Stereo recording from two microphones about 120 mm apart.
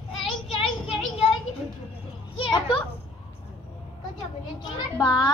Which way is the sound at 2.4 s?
40° left (ahead or behind).